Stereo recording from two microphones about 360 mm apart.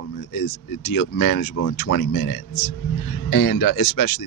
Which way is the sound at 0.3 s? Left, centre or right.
Left.